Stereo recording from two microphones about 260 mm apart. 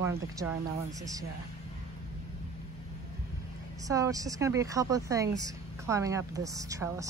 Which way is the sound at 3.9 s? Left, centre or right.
Centre.